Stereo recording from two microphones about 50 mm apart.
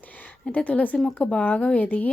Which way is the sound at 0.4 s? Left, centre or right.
Left.